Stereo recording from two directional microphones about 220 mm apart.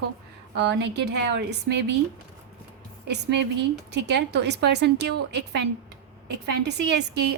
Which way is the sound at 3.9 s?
50° right (ahead or behind).